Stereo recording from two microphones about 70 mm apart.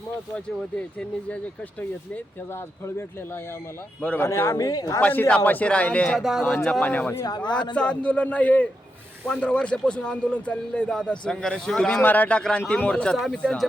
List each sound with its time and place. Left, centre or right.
4.2 s speech: left
4.5 s a woman's voice: left
4.9 s a man's voice: left
6.1 s speech: centre
6.7 s speech: centre
7.3 s a man's voice: left
7.8 s a man's voice: centre
12.0 s a man's voice: left
12.4 s speech: centre